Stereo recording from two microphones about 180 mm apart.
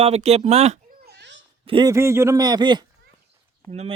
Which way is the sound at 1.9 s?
15° right (ahead or behind).